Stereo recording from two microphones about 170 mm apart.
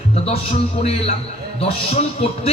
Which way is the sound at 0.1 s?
40° left (ahead or behind).